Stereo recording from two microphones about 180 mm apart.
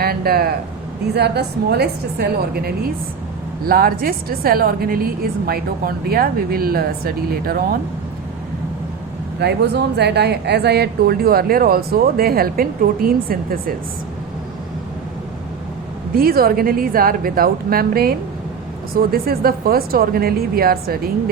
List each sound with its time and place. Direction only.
0.0 s speech: 60° right (ahead or behind)
9.4 s speech: 65° right (ahead or behind)
16.1 s speech: 55° right (ahead or behind)